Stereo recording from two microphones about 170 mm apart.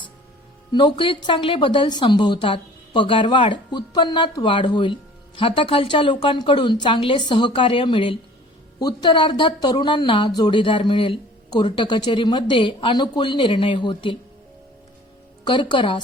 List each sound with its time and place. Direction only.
0.7 s a woman's voice: 25° left (ahead or behind)
15.4 s a woman's voice: 30° left (ahead or behind)